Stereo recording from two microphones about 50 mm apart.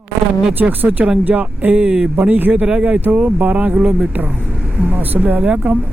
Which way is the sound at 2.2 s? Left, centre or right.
Right.